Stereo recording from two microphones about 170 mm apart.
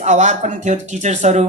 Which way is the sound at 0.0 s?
45° right (ahead or behind).